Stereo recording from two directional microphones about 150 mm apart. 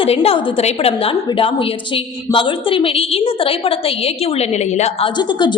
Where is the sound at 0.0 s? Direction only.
40° left (ahead or behind).